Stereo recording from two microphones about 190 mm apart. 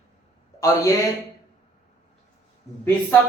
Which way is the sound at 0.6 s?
20° left (ahead or behind).